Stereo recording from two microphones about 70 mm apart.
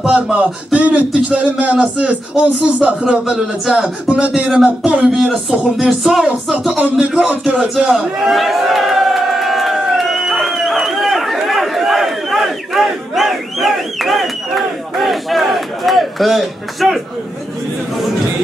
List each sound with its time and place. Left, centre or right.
0.1 s music: centre
0.7 s speech: right
7.0 s a sound: centre